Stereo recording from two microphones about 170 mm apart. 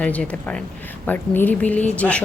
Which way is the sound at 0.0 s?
5° left (ahead or behind).